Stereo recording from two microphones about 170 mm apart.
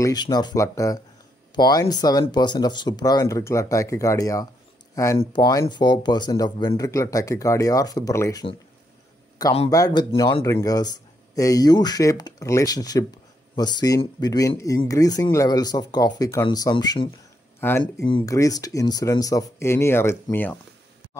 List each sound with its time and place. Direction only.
0.0 s speech: 25° left (ahead or behind)
9.7 s speech: 20° left (ahead or behind)
17.6 s speech: 15° left (ahead or behind)
18.0 s speech: 25° left (ahead or behind)